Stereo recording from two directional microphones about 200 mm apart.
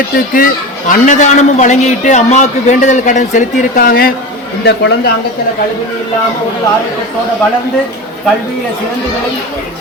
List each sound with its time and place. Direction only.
0.3 s a man's voice: 45° left (ahead or behind)
4.6 s a man's voice: 60° left (ahead or behind)